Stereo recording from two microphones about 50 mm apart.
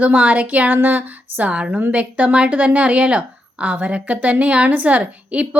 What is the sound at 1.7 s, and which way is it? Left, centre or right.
Speech, right.